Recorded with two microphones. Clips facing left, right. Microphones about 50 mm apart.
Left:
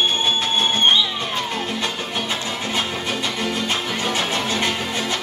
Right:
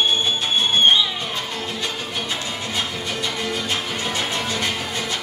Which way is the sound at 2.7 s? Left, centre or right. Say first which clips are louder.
Left 2 dB; left.